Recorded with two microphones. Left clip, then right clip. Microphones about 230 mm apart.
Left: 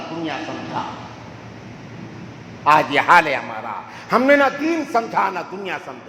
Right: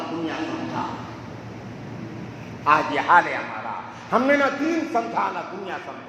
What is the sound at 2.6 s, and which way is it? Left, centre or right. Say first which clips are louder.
A man's voice: left 5 dB; left.